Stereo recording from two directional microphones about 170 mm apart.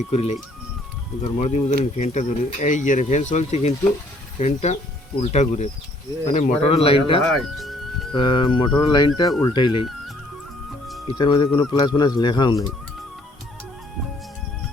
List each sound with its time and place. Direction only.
0.1 s speech: 35° left (ahead or behind)
1.4 s speech: 40° left (ahead or behind)
7.3 s speech: centre (ahead or behind)
8.1 s speech: 30° left (ahead or behind)
11.2 s speech: 30° left (ahead or behind)